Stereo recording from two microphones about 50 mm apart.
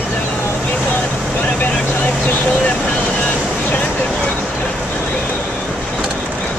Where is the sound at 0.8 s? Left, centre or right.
Left.